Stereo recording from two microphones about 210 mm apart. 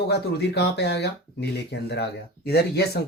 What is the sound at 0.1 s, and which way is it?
Speech, 50° left (ahead or behind).